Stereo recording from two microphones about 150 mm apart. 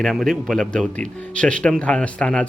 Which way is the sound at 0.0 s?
Centre (ahead or behind).